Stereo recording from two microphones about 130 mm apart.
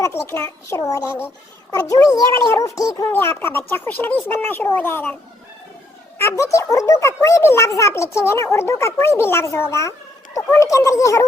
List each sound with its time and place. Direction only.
0.0 s a child's voice: 20° left (ahead or behind)
6.1 s a child's voice: 20° left (ahead or behind)